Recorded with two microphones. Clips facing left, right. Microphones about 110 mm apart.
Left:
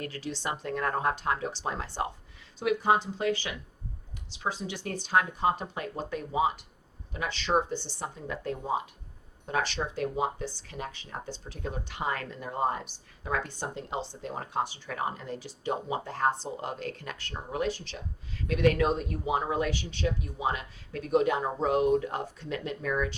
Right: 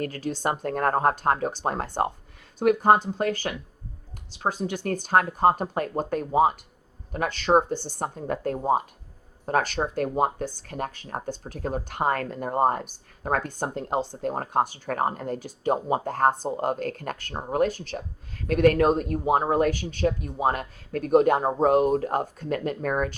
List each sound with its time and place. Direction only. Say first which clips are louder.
0.0 s speech: right 7 dB; 45° right (ahead or behind)